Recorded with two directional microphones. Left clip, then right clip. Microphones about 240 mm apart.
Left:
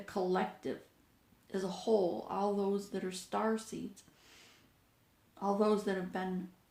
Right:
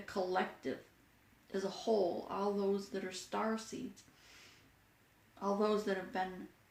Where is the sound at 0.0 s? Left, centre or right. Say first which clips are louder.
Left 2 dB; left.